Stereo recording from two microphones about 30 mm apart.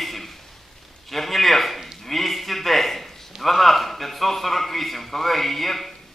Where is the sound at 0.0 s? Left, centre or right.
Centre.